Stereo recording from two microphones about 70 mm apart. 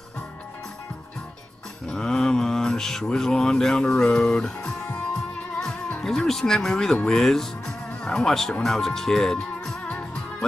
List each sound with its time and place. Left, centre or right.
1.9 s speech: centre
8.6 s music: centre